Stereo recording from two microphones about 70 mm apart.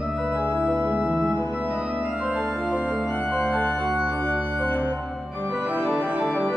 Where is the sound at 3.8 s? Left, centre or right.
Centre.